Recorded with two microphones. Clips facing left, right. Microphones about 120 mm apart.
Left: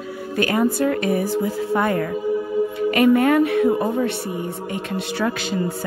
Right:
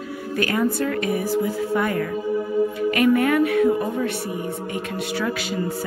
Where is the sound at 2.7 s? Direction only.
25° left (ahead or behind).